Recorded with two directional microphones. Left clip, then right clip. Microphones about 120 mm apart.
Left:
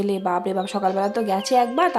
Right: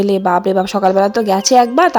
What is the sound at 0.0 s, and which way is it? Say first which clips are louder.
A woman's voice: right 9 dB; 65° right (ahead or behind).